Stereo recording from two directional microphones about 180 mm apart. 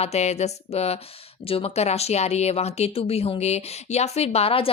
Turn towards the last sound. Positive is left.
turn(degrees=30)  # may be behind; listen again after turning